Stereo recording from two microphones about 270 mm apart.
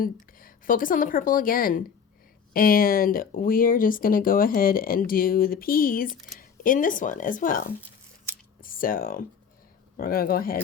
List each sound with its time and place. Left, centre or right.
0.0 s a woman's voice: left